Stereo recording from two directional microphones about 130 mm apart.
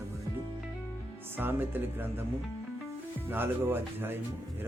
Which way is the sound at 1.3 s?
15° right (ahead or behind).